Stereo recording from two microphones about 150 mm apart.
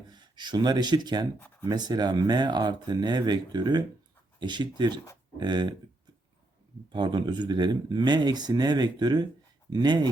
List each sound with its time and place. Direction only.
0.1 s speech: 30° right (ahead or behind)
6.9 s speech: 35° right (ahead or behind)